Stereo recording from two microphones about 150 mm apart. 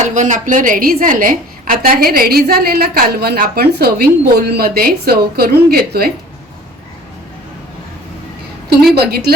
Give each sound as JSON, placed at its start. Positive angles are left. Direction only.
{"t": 0.0, "sound": "a woman's voice", "side_deg": -55}
{"t": 9.0, "sound": "a woman's voice", "side_deg": -90}